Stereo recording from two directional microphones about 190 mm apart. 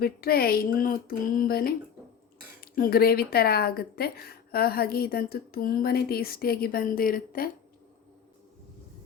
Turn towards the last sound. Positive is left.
turn(degrees=50)  # may be behind; listen again after turning